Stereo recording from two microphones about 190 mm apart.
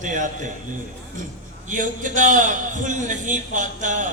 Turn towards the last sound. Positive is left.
turn(degrees=-40)  # may be behind; listen again after turning